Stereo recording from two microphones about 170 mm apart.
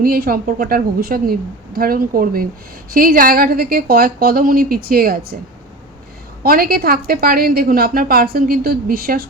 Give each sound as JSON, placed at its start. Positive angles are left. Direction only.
{"t": 0.0, "sound": "a woman's voice", "side_deg": -60}
{"t": 6.4, "sound": "a woman's voice", "side_deg": -60}